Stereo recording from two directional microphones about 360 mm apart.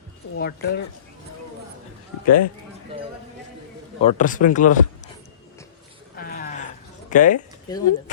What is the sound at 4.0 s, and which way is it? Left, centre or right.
Speech, left.